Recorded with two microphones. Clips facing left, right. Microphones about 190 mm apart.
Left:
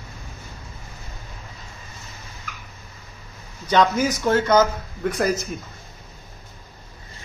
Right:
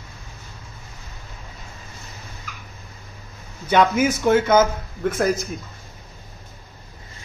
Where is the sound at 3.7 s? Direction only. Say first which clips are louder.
Right 1 dB; 5° right (ahead or behind).